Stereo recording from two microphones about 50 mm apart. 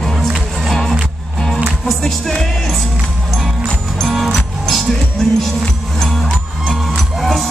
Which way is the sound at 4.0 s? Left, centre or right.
Centre.